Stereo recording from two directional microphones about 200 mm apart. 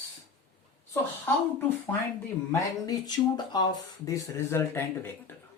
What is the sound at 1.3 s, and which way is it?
Speech, 10° left (ahead or behind).